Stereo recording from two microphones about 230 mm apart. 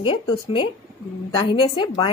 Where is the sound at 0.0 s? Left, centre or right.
Left.